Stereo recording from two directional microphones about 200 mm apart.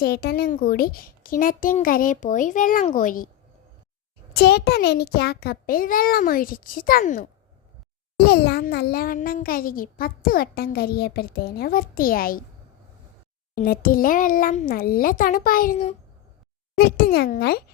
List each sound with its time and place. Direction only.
0.0 s a child's voice: 50° left (ahead or behind)
4.4 s a child's voice: 50° left (ahead or behind)
8.1 s a child's voice: 55° left (ahead or behind)
13.6 s a child's voice: 45° left (ahead or behind)
16.7 s a child's voice: 50° left (ahead or behind)